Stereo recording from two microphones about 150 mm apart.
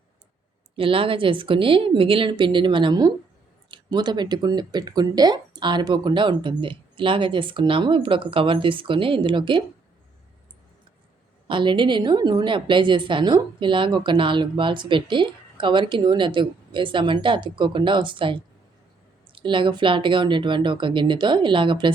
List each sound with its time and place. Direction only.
0.8 s a woman's voice: 35° right (ahead or behind)
11.4 s a woman's voice: 35° right (ahead or behind)